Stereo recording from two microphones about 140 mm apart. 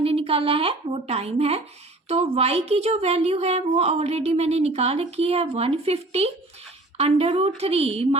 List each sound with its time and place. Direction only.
0.0 s a woman's voice: 45° right (ahead or behind)